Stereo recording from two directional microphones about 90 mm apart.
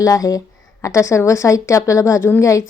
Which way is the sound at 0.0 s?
40° left (ahead or behind).